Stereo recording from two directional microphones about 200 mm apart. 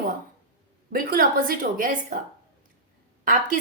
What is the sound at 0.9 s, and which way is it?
A woman's voice, 45° right (ahead or behind).